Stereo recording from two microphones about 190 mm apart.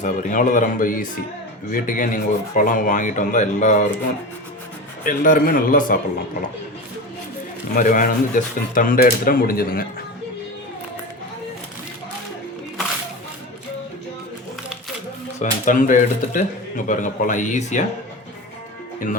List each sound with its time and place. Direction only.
0.0 s speech: 40° left (ahead or behind)
5.0 s speech: 45° left (ahead or behind)
7.7 s speech: 45° left (ahead or behind)
15.4 s speech: 45° left (ahead or behind)